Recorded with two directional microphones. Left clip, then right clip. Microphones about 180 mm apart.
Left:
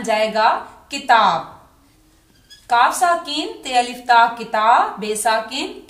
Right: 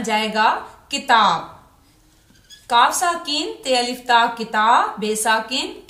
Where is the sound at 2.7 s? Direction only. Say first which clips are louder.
Left 1 dB; 20° left (ahead or behind).